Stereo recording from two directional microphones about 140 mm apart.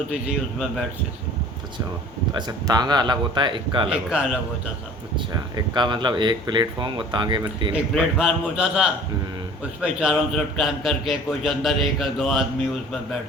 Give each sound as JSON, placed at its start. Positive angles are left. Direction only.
{"t": 2.3, "sound": "speech", "side_deg": -30}
{"t": 3.8, "sound": "a man's voice", "side_deg": -5}
{"t": 5.3, "sound": "speech", "side_deg": -30}
{"t": 7.7, "sound": "a man's voice", "side_deg": -5}